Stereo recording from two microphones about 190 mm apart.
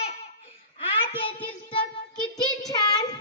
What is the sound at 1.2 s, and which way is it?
Child singing, 25° left (ahead or behind).